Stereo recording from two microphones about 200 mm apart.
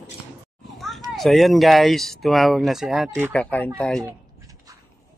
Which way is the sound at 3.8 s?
5° left (ahead or behind).